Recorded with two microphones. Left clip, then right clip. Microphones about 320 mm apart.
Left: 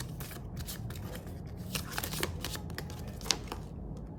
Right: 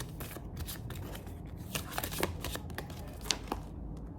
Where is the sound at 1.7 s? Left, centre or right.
Centre.